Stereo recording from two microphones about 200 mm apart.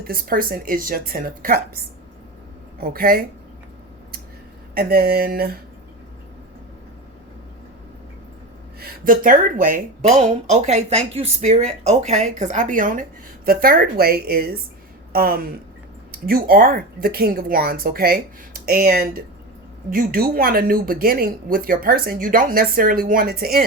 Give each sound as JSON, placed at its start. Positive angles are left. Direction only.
{"t": 0.0, "sound": "speech", "side_deg": -45}
{"t": 2.8, "sound": "speech", "side_deg": -45}
{"t": 4.7, "sound": "speech", "side_deg": -50}
{"t": 8.8, "sound": "speech", "side_deg": -45}